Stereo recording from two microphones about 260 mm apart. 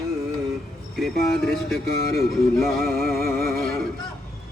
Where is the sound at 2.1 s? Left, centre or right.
Left.